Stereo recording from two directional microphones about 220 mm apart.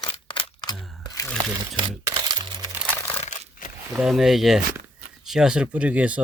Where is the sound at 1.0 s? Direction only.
15° left (ahead or behind).